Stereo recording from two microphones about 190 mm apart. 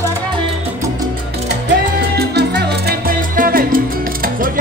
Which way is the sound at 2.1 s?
60° right (ahead or behind).